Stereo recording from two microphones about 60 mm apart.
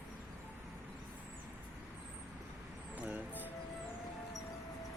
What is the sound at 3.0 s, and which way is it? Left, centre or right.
Music, right.